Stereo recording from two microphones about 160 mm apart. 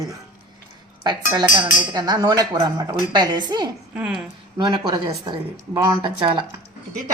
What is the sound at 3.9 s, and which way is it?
Speech, 5° right (ahead or behind).